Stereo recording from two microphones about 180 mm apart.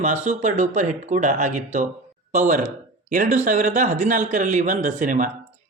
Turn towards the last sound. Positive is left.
turn(degrees=-45)  # may be behind; listen again after turning